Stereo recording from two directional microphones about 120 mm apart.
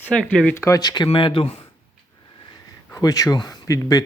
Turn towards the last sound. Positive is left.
turn(degrees=30)  # may be behind; listen again after turning